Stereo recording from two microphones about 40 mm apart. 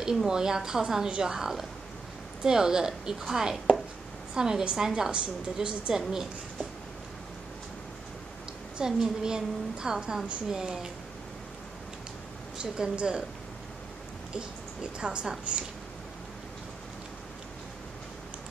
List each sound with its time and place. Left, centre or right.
0.0 s a woman's voice: centre
5.1 s a woman's voice: right
8.7 s a woman's voice: centre
12.5 s speech: right
14.3 s speech: right